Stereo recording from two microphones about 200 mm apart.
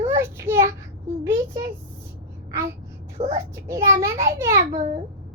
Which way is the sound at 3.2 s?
15° right (ahead or behind).